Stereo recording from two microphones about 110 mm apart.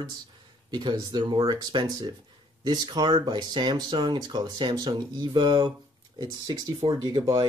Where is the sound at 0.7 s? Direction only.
40° right (ahead or behind).